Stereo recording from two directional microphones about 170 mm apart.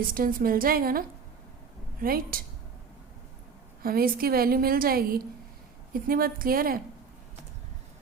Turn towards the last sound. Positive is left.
turn(degrees=-60)  # may be behind; listen again after turning